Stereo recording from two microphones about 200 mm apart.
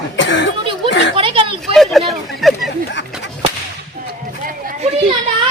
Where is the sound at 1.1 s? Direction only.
25° right (ahead or behind).